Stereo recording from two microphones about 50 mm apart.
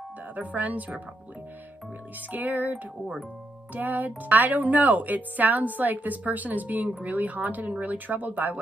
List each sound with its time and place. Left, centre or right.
0.4 s speech: right
2.3 s speech: right